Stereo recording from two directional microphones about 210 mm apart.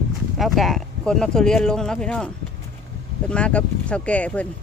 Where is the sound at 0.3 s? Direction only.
Centre (ahead or behind).